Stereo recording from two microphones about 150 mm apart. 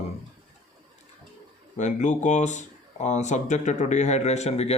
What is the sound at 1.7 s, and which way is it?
Speech, 55° left (ahead or behind).